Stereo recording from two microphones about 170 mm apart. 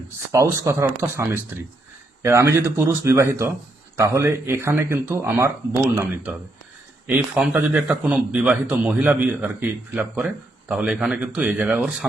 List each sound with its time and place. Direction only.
0.3 s speech: 15° right (ahead or behind)